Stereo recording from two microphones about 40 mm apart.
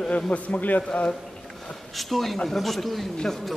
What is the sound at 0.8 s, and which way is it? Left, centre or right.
Speech, centre.